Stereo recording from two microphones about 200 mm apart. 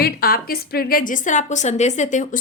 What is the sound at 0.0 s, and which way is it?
A woman's voice, 50° left (ahead or behind).